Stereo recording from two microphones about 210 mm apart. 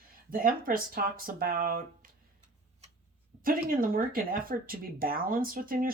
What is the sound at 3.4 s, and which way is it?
Speech, 40° right (ahead or behind).